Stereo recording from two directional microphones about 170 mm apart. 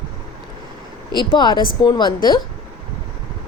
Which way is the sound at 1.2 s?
25° left (ahead or behind).